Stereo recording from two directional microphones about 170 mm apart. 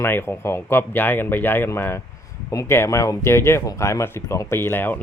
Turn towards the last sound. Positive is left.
turn(degrees=10)  # may be behind; listen again after turning